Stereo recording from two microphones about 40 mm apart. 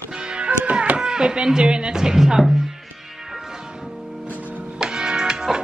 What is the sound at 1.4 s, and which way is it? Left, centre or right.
Speech, centre.